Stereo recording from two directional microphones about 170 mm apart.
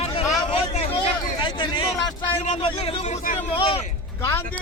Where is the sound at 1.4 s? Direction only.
30° left (ahead or behind).